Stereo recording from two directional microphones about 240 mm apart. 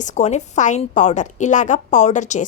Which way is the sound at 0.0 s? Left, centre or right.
Left.